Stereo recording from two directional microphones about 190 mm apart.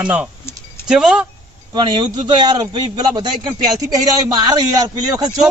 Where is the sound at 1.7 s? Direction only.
25° right (ahead or behind).